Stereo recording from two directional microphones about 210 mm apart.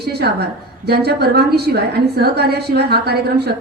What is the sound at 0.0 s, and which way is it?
A woman's voice, 50° right (ahead or behind).